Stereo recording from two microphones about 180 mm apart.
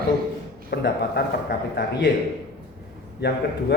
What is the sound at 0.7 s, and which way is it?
A man's voice, 60° left (ahead or behind).